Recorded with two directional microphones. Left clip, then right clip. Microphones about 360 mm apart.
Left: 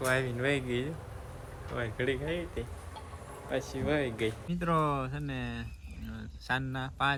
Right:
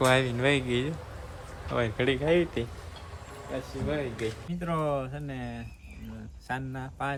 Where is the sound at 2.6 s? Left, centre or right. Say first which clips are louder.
Right 6 dB; right.